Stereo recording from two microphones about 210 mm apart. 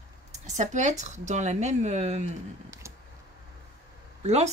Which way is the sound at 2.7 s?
15° right (ahead or behind).